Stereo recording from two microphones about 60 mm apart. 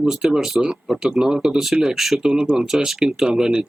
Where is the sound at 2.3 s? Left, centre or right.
Centre.